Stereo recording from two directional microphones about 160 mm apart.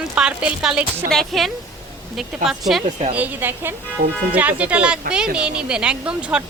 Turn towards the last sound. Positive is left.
turn(degrees=-5)  # may be behind; listen again after turning